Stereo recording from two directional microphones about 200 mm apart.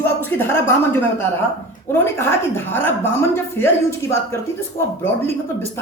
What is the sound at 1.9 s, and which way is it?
A woman's voice, 10° left (ahead or behind).